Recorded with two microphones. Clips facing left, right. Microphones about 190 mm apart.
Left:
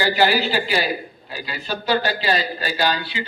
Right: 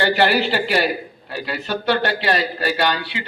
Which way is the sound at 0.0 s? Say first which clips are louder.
Right 1 dB; 65° right (ahead or behind).